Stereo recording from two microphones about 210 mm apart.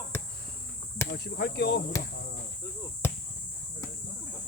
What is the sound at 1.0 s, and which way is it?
Speech, 50° left (ahead or behind).